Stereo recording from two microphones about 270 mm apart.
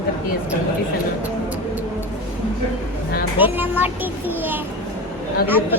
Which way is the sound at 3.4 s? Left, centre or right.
Centre.